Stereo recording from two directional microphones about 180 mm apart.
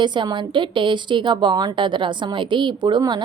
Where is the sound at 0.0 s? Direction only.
25° right (ahead or behind).